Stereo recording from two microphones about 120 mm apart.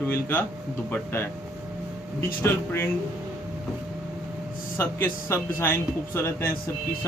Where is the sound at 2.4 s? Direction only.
20° left (ahead or behind).